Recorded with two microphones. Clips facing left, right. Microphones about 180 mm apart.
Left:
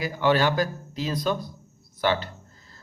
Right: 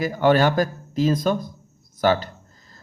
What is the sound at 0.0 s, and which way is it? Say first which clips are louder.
Speech: right 4 dB; 50° right (ahead or behind).